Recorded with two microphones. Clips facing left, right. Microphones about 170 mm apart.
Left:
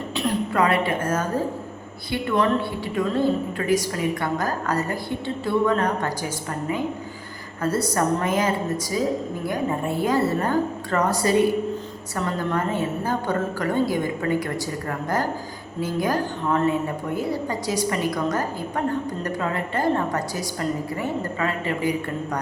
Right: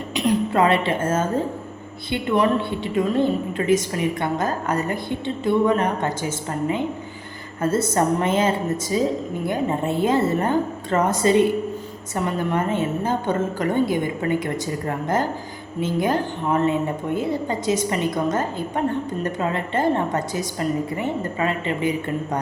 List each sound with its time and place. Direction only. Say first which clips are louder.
0.5 s a woman's voice: left 1 dB; 25° right (ahead or behind)
2.3 s a woman's voice: right 2 dB; 20° right (ahead or behind)